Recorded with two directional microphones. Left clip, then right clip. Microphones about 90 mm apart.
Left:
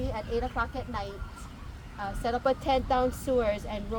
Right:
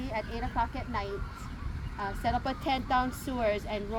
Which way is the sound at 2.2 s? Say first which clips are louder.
Left 4 dB; 50° left (ahead or behind).